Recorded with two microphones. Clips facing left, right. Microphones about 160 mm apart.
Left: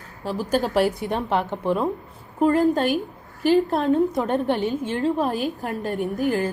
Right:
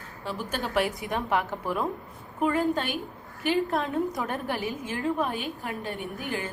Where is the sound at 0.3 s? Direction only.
40° left (ahead or behind).